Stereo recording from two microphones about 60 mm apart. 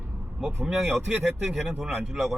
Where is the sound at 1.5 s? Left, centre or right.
Centre.